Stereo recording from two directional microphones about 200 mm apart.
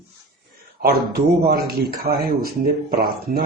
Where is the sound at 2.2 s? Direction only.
45° right (ahead or behind).